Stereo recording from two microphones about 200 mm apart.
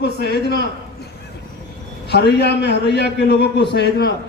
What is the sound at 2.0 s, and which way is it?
Speech, 55° left (ahead or behind).